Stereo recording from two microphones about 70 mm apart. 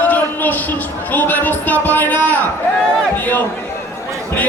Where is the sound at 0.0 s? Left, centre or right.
Left.